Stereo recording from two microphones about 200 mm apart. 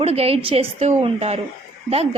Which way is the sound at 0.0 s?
30° right (ahead or behind).